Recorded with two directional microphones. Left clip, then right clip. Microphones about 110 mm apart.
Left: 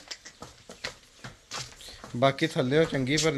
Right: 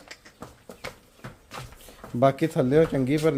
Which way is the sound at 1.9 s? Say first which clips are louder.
Right 3 dB; 25° right (ahead or behind).